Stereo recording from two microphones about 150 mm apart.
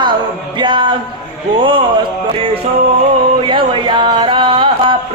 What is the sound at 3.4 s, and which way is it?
Speech, 35° right (ahead or behind).